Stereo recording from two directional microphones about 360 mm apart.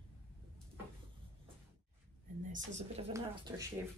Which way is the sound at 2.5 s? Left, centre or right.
Centre.